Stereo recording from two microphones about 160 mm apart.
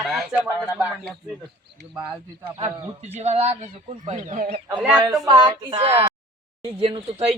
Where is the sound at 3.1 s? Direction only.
40° right (ahead or behind).